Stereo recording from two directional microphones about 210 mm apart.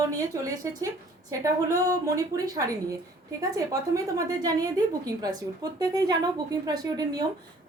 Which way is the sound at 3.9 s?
15° right (ahead or behind).